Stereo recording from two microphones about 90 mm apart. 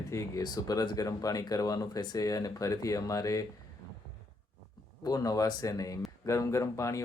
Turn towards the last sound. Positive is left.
turn(degrees=35)  # may be behind; listen again after turning